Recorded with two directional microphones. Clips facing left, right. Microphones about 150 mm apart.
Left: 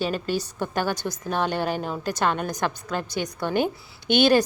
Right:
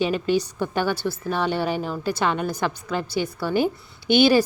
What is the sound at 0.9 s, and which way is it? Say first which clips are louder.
Speech: right 4 dB; 15° left (ahead or behind).